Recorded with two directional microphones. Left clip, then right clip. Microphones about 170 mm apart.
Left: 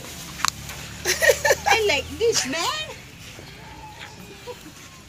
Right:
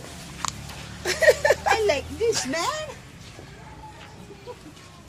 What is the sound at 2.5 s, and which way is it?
Speech, 5° right (ahead or behind).